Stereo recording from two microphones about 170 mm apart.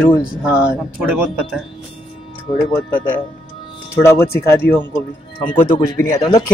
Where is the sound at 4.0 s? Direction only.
15° left (ahead or behind).